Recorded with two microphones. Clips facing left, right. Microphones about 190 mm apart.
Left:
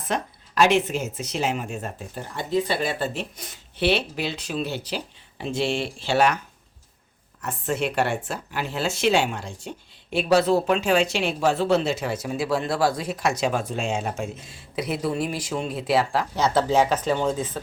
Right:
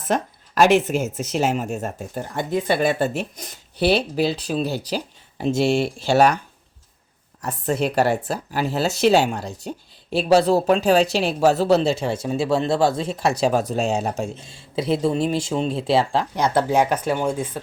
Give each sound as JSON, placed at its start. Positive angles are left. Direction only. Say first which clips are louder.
{"t": 0.1, "sound": "speech", "louder": "right 5 dB", "side_deg": -45}
{"t": 7.4, "sound": "a woman's voice", "louder": "right 4 dB", "side_deg": -35}
{"t": 16.3, "sound": "speech", "louder": "even", "side_deg": -15}